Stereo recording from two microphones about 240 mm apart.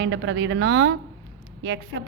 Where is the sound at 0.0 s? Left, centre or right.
Right.